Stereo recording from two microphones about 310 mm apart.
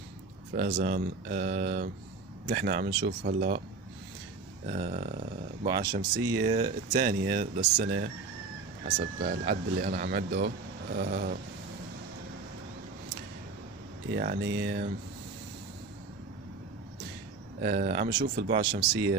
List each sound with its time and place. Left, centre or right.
0.6 s speech: right
4.6 s speech: right
14.1 s speech: right
17.6 s speech: right
18.6 s speech: centre